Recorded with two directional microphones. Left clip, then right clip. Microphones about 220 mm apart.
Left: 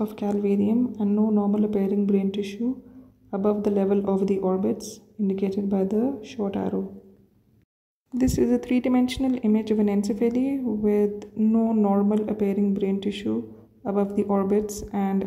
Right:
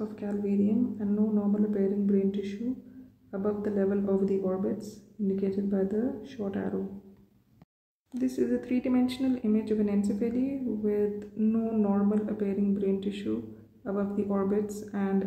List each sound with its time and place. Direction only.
0.1 s speech: 30° left (ahead or behind)
8.2 s speech: 30° left (ahead or behind)